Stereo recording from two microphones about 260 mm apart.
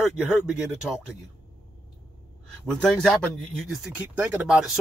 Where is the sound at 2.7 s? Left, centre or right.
Centre.